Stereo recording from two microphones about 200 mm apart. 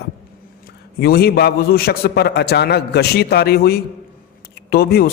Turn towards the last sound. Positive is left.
turn(degrees=50)  # may be behind; listen again after turning